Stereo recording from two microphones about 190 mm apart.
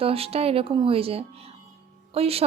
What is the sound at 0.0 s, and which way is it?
A woman's voice, 30° right (ahead or behind).